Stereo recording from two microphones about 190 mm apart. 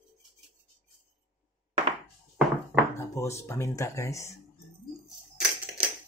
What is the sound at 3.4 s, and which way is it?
Speech, 15° left (ahead or behind).